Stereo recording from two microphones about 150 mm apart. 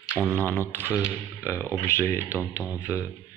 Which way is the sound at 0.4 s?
15° left (ahead or behind).